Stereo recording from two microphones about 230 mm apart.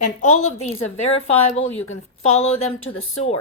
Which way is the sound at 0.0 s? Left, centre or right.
Left.